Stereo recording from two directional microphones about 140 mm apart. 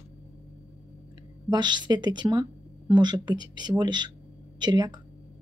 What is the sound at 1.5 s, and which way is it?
Speech, 30° right (ahead or behind).